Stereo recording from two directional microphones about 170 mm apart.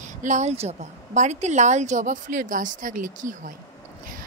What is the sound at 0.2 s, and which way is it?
Speech, 45° right (ahead or behind).